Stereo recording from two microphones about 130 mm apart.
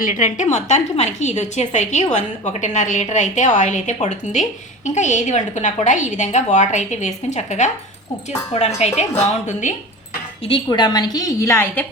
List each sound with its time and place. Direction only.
0.0 s a woman's voice: 80° left
10.5 s a woman's voice: 35° left (ahead or behind); by 11.9 s 15° left (ahead or behind)